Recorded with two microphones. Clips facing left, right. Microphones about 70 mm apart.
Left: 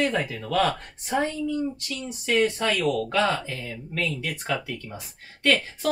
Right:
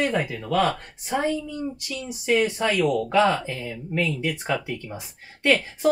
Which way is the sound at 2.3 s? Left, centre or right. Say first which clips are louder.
Right 1 dB; centre.